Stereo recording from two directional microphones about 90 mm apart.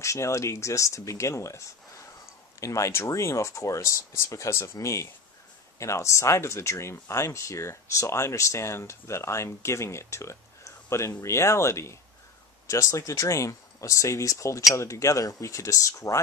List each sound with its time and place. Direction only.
0.0 s speech: 35° left (ahead or behind)
2.6 s speech: 35° left (ahead or behind)